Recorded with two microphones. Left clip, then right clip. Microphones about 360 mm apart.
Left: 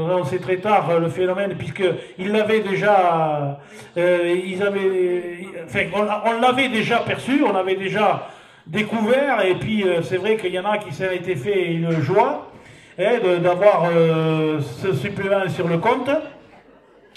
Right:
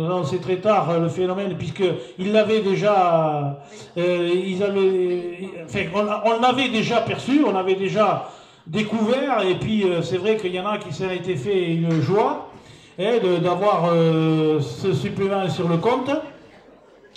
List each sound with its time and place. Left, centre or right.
0.1 s a man's voice: left